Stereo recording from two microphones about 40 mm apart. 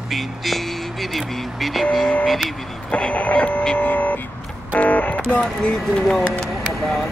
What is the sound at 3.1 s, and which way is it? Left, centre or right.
Music, left.